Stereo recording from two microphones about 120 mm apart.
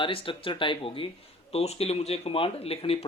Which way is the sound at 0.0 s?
45° left (ahead or behind).